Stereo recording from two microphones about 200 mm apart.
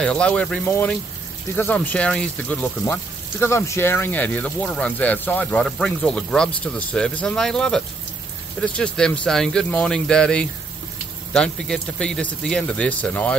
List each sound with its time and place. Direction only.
0.0 s speech: 5° left (ahead or behind)